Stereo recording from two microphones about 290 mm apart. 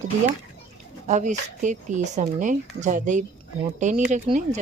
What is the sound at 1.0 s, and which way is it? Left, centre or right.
Speech, right.